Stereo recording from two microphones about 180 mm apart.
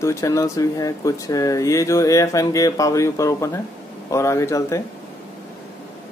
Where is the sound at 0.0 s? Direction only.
15° left (ahead or behind).